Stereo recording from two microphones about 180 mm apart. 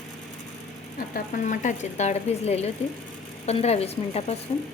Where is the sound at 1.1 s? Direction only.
50° left (ahead or behind).